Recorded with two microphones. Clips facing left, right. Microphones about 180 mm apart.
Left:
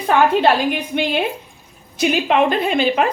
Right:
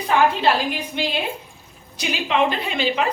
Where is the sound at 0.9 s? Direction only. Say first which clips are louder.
Left 5 dB; 55° left (ahead or behind).